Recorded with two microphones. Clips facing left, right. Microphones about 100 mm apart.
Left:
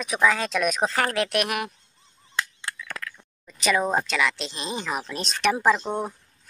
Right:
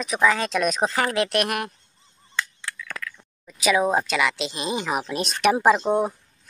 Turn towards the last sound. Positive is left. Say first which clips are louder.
# right 4 dB
turn(degrees=-25)  # may be behind; listen again after turning